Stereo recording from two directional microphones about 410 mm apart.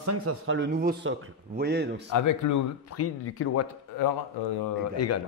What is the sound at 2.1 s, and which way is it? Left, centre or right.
Speech, left.